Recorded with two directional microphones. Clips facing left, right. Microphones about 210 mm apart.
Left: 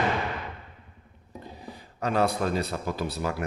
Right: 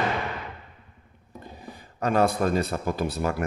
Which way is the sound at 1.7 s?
50° right (ahead or behind).